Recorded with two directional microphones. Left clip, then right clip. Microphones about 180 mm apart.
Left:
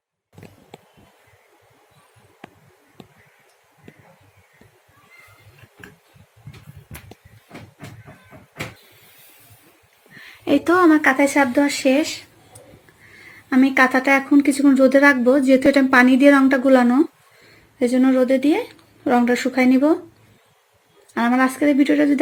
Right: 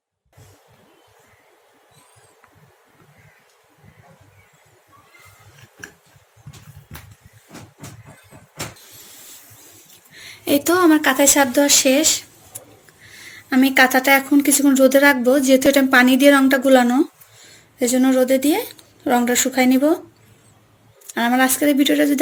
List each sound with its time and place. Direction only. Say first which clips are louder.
10.2 s a woman's voice: even; 20° left (ahead or behind)
13.1 s a woman's voice: even; 25° left (ahead or behind)
21.2 s a woman's voice: right 1 dB; 20° left (ahead or behind)